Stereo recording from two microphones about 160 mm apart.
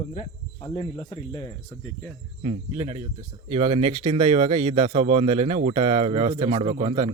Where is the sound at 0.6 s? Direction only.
30° left (ahead or behind).